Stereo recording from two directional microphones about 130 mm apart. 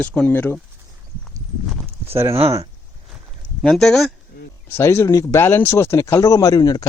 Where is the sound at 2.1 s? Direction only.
20° right (ahead or behind).